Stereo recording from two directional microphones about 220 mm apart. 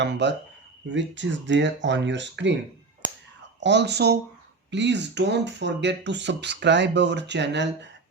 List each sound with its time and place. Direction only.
0.0 s speech: 50° right (ahead or behind)
3.6 s speech: 50° right (ahead or behind)